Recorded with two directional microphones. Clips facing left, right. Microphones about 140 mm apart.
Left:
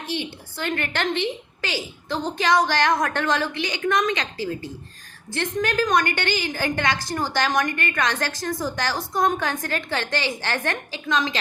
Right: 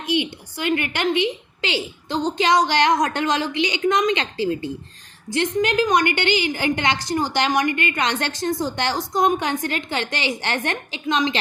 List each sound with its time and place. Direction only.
0.0 s a woman's voice: 15° right (ahead or behind)